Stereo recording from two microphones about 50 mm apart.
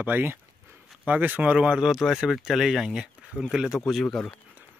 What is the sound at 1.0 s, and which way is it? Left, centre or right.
Speech, right.